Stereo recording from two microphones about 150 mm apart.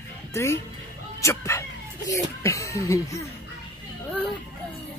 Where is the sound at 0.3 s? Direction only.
15° left (ahead or behind).